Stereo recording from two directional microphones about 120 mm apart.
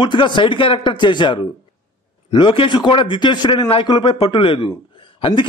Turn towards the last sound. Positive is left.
turn(degrees=45)  # may be behind; listen again after turning